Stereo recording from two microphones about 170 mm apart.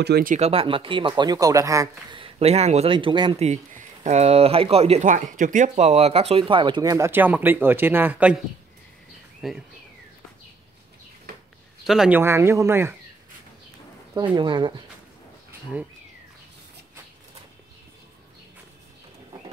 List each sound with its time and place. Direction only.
0.0 s speech: 65° right (ahead or behind)
0.4 s speech: 35° right (ahead or behind); by 1.9 s 20° right (ahead or behind)
2.1 s speech: 35° right (ahead or behind); by 8.4 s 10° right (ahead or behind)
9.4 s speech: centre (ahead or behind)
11.8 s speech: 5° right (ahead or behind)
12.2 s speech: 15° right (ahead or behind)
14.3 s speech: 25° right (ahead or behind)